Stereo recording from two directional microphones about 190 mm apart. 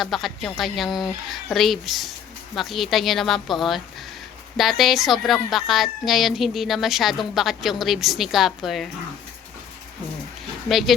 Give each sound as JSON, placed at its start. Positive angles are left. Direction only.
{"t": 0.0, "sound": "speech", "side_deg": 0}
{"t": 10.7, "sound": "speech", "side_deg": 0}